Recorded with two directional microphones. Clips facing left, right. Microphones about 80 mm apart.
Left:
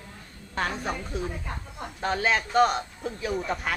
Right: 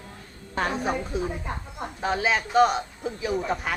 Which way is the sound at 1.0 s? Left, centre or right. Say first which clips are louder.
Right 3 dB; centre.